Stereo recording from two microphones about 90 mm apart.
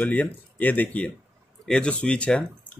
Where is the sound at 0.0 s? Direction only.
20° left (ahead or behind).